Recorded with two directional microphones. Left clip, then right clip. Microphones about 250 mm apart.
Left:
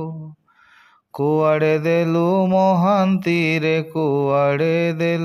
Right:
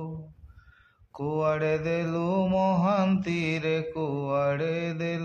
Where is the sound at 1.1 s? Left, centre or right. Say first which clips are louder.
Left 10 dB; left.